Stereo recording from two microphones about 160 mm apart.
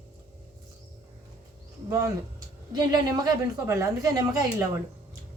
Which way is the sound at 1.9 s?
20° right (ahead or behind).